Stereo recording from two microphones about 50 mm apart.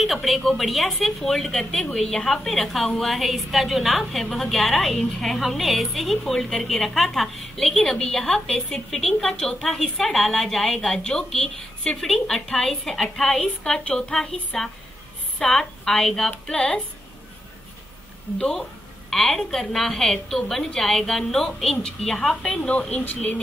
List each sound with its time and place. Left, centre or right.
0.0 s a woman's voice: centre
13.8 s a woman's voice: left
14.1 s a woman's voice: centre
18.4 s a woman's voice: centre
22.7 s a woman's voice: left